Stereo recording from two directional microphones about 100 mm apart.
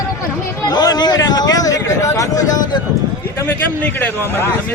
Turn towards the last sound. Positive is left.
turn(degrees=15)  # may be behind; listen again after turning